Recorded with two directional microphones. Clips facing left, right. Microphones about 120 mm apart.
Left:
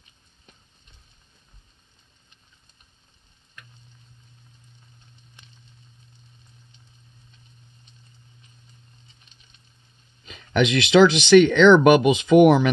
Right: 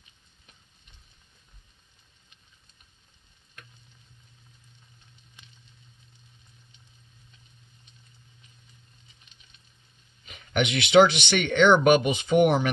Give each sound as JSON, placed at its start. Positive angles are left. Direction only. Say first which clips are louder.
{"t": 10.6, "sound": "speech", "louder": "left 3 dB", "side_deg": 90}